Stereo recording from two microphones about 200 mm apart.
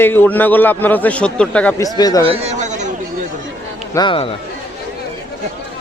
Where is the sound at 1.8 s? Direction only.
20° left (ahead or behind).